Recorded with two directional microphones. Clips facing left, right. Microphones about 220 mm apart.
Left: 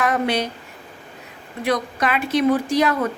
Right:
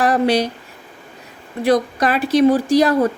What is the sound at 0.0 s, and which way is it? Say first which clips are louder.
Speech: right 5 dB; 35° right (ahead or behind).